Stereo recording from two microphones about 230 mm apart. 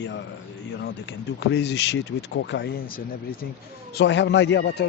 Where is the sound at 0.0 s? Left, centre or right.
Left.